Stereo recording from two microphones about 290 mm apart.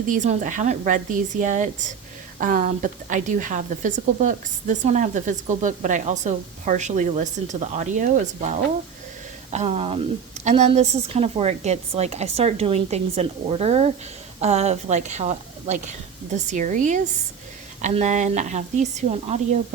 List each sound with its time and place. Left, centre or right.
0.1 s a woman's voice: right